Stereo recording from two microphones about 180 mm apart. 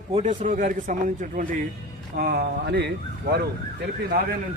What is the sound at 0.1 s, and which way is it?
Speech, 40° right (ahead or behind).